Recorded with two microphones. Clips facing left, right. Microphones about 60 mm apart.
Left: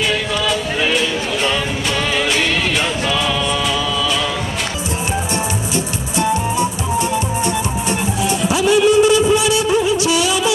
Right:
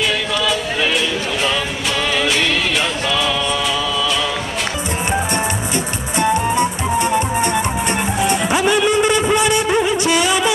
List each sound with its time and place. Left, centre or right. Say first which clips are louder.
0.5 s music: left 2 dB; centre
6.1 s music: right 2 dB; right